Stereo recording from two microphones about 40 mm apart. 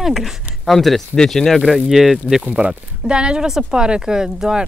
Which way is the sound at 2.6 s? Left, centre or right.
Right.